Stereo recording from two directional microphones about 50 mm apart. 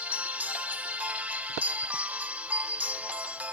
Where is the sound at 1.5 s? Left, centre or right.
Right.